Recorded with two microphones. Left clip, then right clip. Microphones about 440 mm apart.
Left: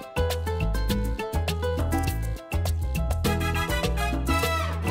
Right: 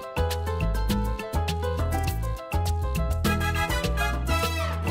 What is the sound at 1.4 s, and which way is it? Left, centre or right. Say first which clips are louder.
Music: even; left.